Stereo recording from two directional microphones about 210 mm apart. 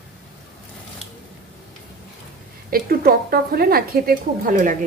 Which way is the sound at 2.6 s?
45° right (ahead or behind).